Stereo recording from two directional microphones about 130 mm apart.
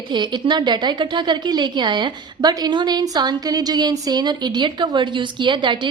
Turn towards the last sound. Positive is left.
turn(degrees=-35)  # may be behind; listen again after turning